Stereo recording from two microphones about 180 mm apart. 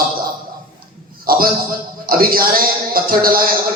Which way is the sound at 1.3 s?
55° right (ahead or behind).